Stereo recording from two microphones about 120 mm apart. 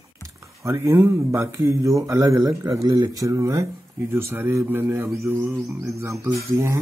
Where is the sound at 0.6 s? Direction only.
25° right (ahead or behind).